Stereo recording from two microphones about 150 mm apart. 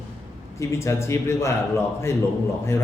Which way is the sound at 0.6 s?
20° left (ahead or behind).